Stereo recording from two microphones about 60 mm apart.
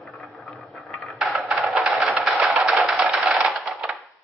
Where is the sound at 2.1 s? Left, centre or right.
Centre.